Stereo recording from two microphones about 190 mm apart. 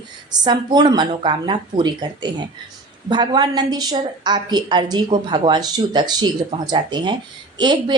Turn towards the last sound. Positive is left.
turn(degrees=-25)  # may be behind; listen again after turning